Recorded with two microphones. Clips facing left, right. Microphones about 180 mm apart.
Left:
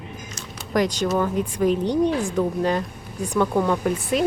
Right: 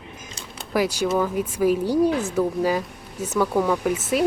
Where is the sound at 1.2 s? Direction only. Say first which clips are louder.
Even; 5° right (ahead or behind).